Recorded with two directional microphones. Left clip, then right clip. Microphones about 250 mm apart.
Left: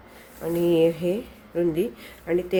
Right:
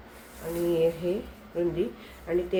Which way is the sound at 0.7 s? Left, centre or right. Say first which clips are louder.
Left 4 dB; left.